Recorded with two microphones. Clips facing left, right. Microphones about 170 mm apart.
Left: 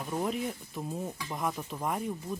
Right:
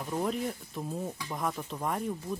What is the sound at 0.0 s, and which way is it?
Speech, centre (ahead or behind).